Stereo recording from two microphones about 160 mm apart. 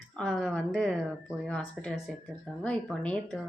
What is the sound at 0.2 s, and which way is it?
Speech, 5° left (ahead or behind).